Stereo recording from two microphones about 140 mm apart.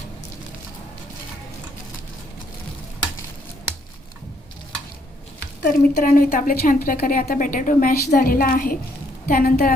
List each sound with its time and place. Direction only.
5.6 s a woman's voice: 80° left